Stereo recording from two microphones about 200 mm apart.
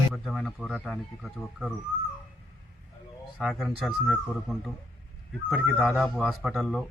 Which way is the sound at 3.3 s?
Centre (ahead or behind).